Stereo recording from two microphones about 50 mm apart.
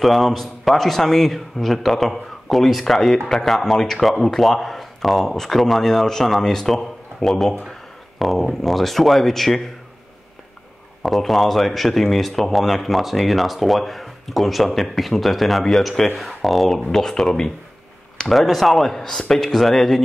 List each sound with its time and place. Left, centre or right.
0.0 s speech: centre
11.0 s speech: centre